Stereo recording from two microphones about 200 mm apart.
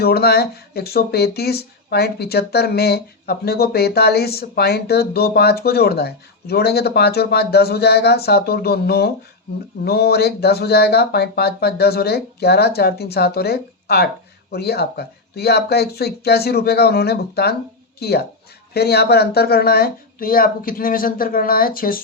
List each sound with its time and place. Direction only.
0.0 s speech: 50° left (ahead or behind)